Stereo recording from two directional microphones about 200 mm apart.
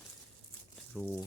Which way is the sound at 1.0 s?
10° left (ahead or behind).